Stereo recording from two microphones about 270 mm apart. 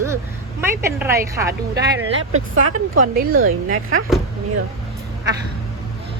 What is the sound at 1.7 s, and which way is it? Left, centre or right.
Speech, right.